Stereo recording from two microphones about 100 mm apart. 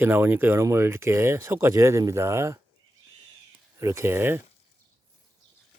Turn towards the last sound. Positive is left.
turn(degrees=-20)  # may be behind; listen again after turning